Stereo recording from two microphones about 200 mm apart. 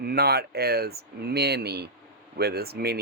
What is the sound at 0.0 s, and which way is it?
Speech, 50° right (ahead or behind).